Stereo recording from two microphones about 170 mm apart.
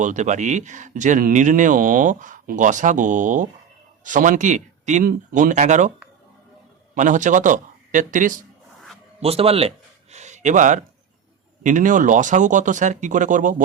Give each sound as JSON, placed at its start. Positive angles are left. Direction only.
{"t": 0.0, "sound": "speech", "side_deg": -45}
{"t": 6.9, "sound": "speech", "side_deg": -45}
{"t": 9.2, "sound": "speech", "side_deg": -35}